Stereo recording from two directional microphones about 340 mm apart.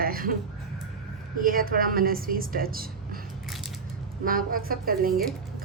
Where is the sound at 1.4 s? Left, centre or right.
Right.